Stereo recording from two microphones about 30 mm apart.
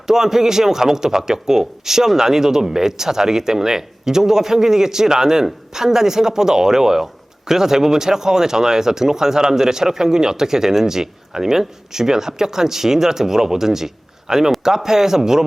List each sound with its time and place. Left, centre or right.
0.1 s speech: centre